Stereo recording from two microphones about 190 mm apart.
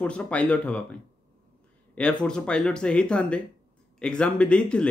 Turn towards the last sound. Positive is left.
turn(degrees=5)  # may be behind; listen again after turning